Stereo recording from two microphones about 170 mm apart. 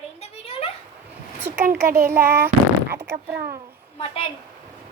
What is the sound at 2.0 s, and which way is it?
Speech, 15° right (ahead or behind).